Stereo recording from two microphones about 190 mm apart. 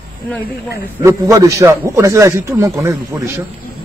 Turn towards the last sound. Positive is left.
turn(degrees=-15)  # may be behind; listen again after turning